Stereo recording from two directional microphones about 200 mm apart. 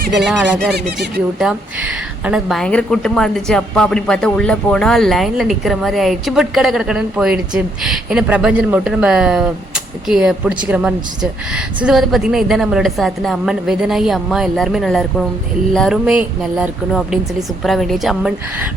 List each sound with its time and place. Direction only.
0.3 s a woman's voice: centre (ahead or behind)